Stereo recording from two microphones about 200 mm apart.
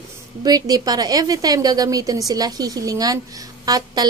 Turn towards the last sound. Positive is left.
turn(degrees=-20)  # may be behind; listen again after turning